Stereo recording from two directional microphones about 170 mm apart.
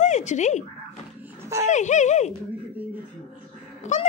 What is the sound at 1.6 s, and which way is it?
Speech, 45° left (ahead or behind).